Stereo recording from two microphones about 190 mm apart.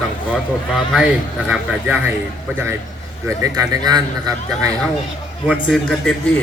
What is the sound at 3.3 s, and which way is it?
Speech, 20° right (ahead or behind).